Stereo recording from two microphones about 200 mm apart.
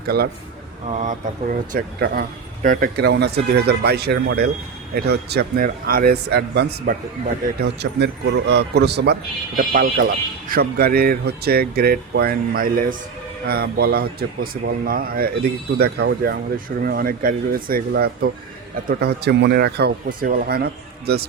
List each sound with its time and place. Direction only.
0.9 s a man's voice: 35° right (ahead or behind); by 9.1 s 55° right (ahead or behind)
9.6 s speech: 45° right (ahead or behind)